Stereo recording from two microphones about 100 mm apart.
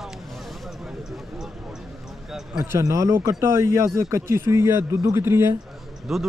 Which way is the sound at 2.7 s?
30° right (ahead or behind).